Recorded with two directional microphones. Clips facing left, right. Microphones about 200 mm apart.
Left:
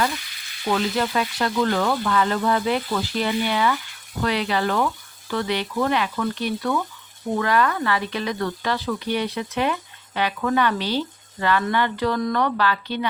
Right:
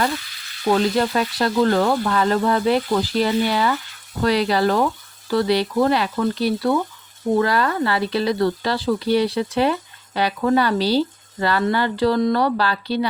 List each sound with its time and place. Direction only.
0.7 s speech: 40° right (ahead or behind)